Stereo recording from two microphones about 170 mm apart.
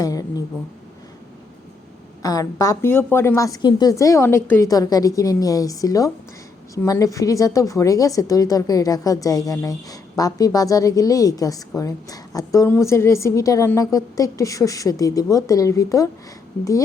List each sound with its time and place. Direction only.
0.0 s speech: 20° left (ahead or behind)
2.2 s speech: 20° left (ahead or behind)